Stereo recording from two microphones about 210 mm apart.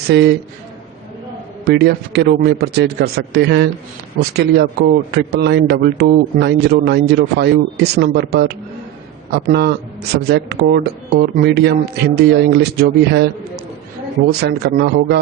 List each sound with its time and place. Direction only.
0.1 s a man's voice: 55° right (ahead or behind)
1.6 s a man's voice: 50° right (ahead or behind)
14.4 s a man's voice: 55° right (ahead or behind)